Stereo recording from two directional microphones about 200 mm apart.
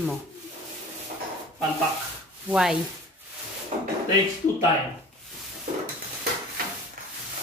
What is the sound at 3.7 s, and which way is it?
Drawer open or close, 35° right (ahead or behind).